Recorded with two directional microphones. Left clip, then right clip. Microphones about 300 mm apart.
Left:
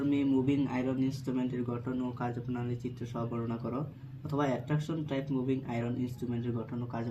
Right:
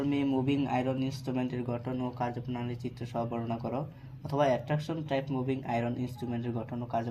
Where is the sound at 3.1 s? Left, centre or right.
Centre.